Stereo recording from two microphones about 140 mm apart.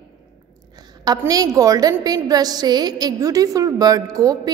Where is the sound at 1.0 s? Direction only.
25° right (ahead or behind).